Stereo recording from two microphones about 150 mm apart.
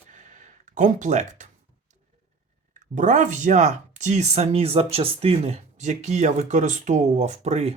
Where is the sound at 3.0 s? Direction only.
55° right (ahead or behind).